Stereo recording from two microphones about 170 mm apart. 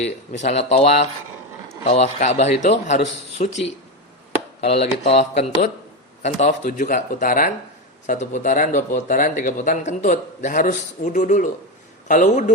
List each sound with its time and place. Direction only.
0.0 s a man's voice: 40° left (ahead or behind)